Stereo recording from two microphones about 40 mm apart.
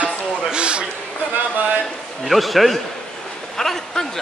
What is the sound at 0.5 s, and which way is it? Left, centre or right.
Speech, right.